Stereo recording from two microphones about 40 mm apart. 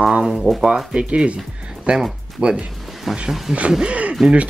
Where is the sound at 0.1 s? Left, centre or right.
Centre.